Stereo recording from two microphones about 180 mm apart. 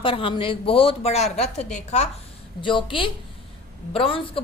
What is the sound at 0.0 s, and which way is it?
Speech, 30° left (ahead or behind).